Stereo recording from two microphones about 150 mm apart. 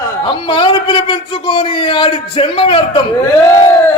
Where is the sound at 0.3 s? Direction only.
35° left (ahead or behind).